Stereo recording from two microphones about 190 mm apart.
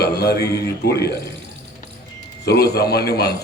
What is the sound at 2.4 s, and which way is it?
Speech, 60° left (ahead or behind).